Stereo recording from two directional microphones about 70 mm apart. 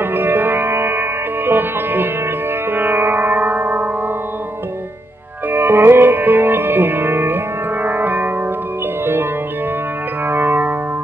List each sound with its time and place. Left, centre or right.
0.0 s music: right
5.5 s music: right